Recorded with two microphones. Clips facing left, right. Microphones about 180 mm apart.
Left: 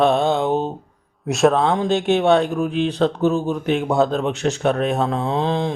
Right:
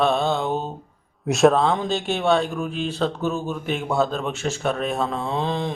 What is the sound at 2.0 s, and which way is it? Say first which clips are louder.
Mantra: left 8 dB; 20° left (ahead or behind).